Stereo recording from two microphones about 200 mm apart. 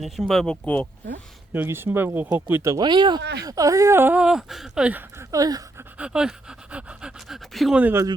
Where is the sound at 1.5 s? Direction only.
10° right (ahead or behind).